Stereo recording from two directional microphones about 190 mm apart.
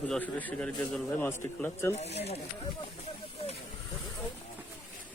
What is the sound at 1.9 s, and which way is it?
Speech, 35° left (ahead or behind).